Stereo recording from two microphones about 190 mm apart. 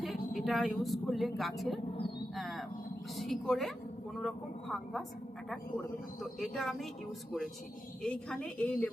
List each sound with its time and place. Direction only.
0.0 s speech: centre (ahead or behind)
2.3 s a sound: centre (ahead or behind)
3.2 s a woman's voice: centre (ahead or behind)
6.4 s speech: centre (ahead or behind)
8.0 s a woman's voice: 5° left (ahead or behind)